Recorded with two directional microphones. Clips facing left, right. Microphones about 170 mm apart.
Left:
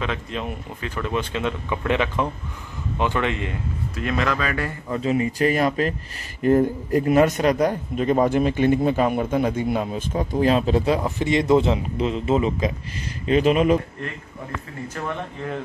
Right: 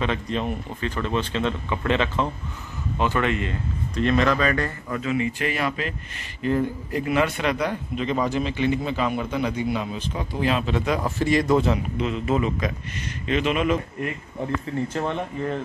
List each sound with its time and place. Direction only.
0.0 s speech: centre (ahead or behind); by 3.5 s 20° left (ahead or behind)
3.9 s speech: 5° left (ahead or behind)
4.8 s speech: 25° left (ahead or behind)
5.1 s a man's voice: 40° left (ahead or behind)
11.0 s speech: 15° left (ahead or behind); by 13.7 s 35° left (ahead or behind)
15.0 s speech: 25° right (ahead or behind)